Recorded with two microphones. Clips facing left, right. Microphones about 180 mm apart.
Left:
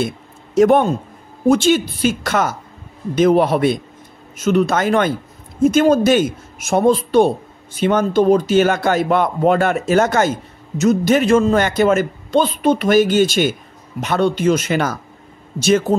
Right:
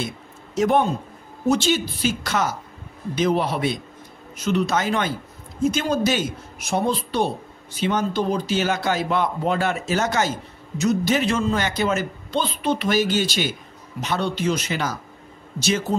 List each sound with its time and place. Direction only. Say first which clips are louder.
0.6 s a man's voice: left 7 dB; 55° left (ahead or behind)